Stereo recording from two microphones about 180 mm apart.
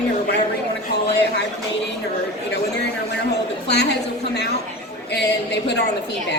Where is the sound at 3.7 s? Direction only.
65° left (ahead or behind).